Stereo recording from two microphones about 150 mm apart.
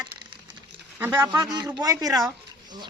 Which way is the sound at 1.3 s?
25° right (ahead or behind).